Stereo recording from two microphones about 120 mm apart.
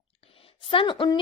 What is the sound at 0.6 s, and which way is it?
Speech, 45° left (ahead or behind).